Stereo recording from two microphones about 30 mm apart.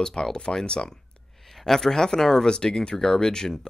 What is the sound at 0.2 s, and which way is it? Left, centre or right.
Speech, left.